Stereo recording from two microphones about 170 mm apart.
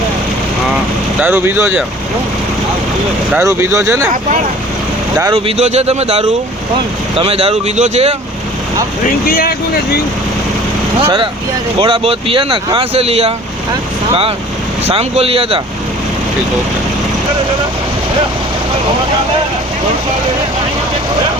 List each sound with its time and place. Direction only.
1.2 s speech: 15° right (ahead or behind)
3.3 s speech: 15° right (ahead or behind)
5.3 s speech: 35° right (ahead or behind)
9.0 s speech: 55° left (ahead or behind)
11.8 s speech: 30° right (ahead or behind)
14.8 s speech: 35° right (ahead or behind)